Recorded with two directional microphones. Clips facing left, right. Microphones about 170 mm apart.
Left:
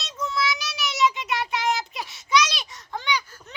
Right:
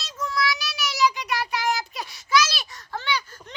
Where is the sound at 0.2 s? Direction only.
20° left (ahead or behind).